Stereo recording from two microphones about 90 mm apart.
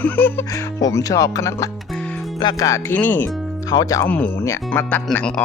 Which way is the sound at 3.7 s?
45° left (ahead or behind).